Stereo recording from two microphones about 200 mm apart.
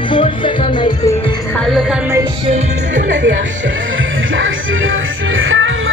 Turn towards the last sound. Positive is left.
turn(degrees=-75)  # may be behind; listen again after turning